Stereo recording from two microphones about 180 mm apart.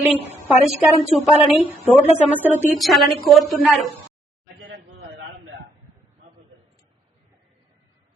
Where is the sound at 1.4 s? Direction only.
Centre (ahead or behind).